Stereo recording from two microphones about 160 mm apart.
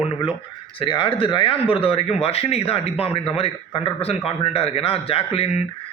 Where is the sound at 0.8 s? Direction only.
30° left (ahead or behind).